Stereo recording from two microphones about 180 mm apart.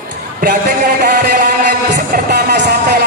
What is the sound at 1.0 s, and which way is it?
Music, 55° right (ahead or behind).